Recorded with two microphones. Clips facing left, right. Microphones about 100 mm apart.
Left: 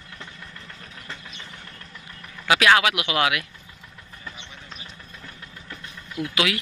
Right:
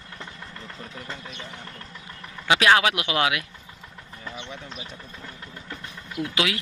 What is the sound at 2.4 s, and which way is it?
Speech, 25° right (ahead or behind).